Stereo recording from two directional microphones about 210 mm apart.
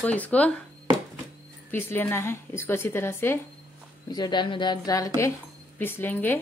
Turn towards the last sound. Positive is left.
turn(degrees=10)  # may be behind; listen again after turning